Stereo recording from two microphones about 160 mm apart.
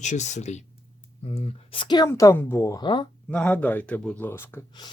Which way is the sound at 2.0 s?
15° left (ahead or behind).